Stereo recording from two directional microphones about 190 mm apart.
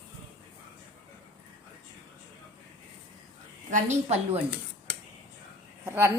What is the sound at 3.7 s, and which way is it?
Speech, 35° right (ahead or behind).